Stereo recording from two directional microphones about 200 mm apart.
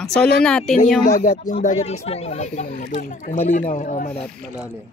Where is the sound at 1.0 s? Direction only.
40° left (ahead or behind).